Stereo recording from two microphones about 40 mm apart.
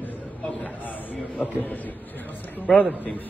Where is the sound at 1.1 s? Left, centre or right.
Left.